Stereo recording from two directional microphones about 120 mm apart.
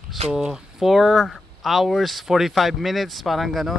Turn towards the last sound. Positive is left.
turn(degrees=0)  # may be behind; listen again after turning